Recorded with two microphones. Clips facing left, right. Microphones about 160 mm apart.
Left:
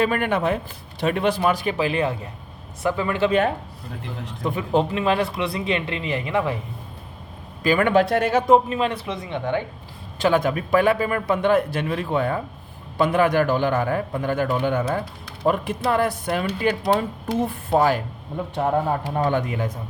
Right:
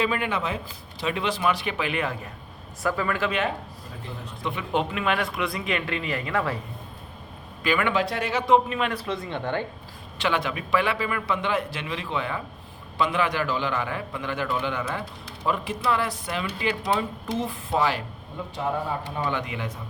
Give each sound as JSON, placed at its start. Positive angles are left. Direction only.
{"t": 0.0, "sound": "a man's voice", "side_deg": 50}
{"t": 4.4, "sound": "speech", "side_deg": 40}
{"t": 7.6, "sound": "a man's voice", "side_deg": 40}
{"t": 9.0, "sound": "speech", "side_deg": 15}
{"t": 10.2, "sound": "a man's voice", "side_deg": 45}
{"t": 19.1, "sound": "a man's voice", "side_deg": 45}